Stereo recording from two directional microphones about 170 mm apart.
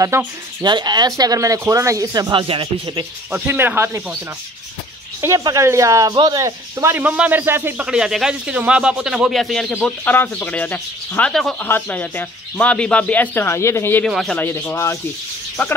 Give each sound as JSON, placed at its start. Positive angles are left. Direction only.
{"t": 0.1, "sound": "speech", "side_deg": -15}
{"t": 3.3, "sound": "speech", "side_deg": -10}
{"t": 5.2, "sound": "speech", "side_deg": -20}
{"t": 14.0, "sound": "speech", "side_deg": 0}